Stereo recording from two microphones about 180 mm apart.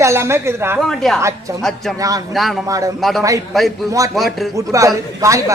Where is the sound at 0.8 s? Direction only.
Centre (ahead or behind).